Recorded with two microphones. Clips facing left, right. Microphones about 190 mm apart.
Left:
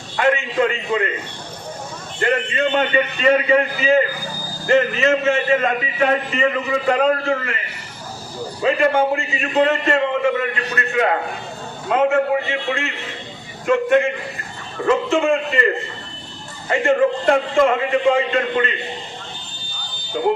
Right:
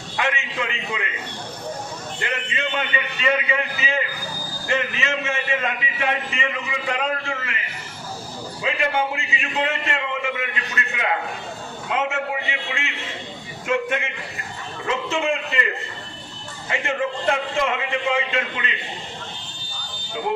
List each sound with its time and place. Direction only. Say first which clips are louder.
0.2 s a man's voice: left 9 dB; 45° left (ahead or behind)
2.2 s a man's voice: left 10 dB; 45° left (ahead or behind)
8.6 s a man's voice: left 7 dB; 45° left (ahead or behind)